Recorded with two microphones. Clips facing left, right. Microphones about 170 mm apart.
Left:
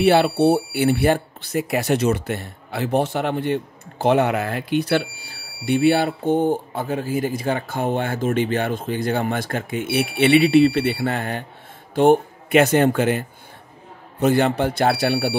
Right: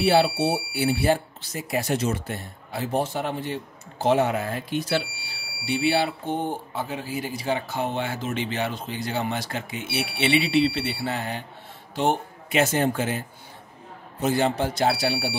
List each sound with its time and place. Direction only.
0.0 s speech: 65° left (ahead or behind)
14.2 s speech: 60° left (ahead or behind)